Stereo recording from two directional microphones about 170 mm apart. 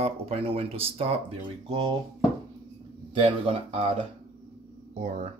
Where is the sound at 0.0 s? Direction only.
35° right (ahead or behind).